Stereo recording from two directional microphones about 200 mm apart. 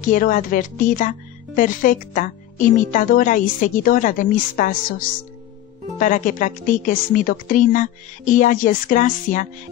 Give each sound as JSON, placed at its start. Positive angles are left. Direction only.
{"t": 0.0, "sound": "a woman's voice", "side_deg": 45}